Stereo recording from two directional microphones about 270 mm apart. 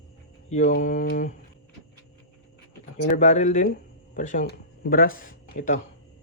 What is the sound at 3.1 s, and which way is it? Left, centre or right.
Speech, left.